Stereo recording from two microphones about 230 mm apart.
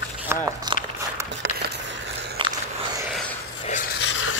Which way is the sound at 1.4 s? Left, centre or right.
Right.